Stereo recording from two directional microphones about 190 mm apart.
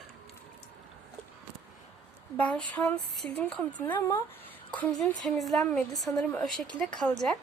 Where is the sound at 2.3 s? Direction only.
5° left (ahead or behind).